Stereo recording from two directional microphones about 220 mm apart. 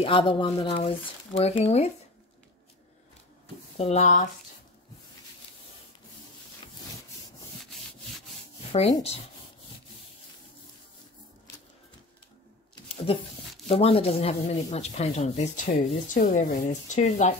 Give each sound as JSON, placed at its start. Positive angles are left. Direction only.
{"t": 0.0, "sound": "speech", "side_deg": 25}
{"t": 3.7, "sound": "speech", "side_deg": 30}
{"t": 8.7, "sound": "speech", "side_deg": 30}
{"t": 12.8, "sound": "a sound", "side_deg": 25}
{"t": 13.7, "sound": "speech", "side_deg": 25}